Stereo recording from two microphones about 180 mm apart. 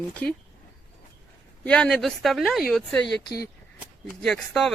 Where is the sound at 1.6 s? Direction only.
5° left (ahead or behind).